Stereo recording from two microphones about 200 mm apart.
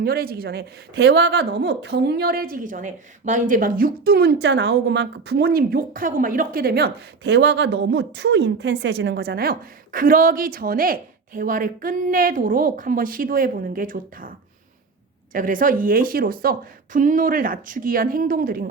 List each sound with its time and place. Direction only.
0.0 s a woman's voice: 50° right (ahead or behind)